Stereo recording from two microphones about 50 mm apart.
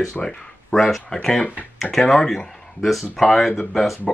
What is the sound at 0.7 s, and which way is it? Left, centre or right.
Speech, centre.